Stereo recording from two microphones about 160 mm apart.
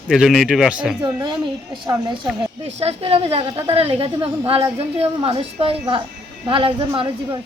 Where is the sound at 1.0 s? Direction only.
30° right (ahead or behind).